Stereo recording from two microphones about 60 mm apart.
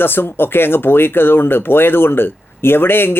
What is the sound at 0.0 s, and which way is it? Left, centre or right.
Speech, left.